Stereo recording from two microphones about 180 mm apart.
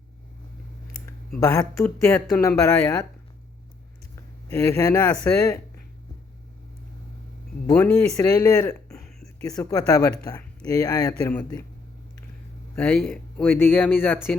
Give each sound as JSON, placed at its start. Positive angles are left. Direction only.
{"t": 1.4, "sound": "speech", "side_deg": 20}
{"t": 4.1, "sound": "speech", "side_deg": 15}
{"t": 8.1, "sound": "speech", "side_deg": 15}
{"t": 12.7, "sound": "speech", "side_deg": 10}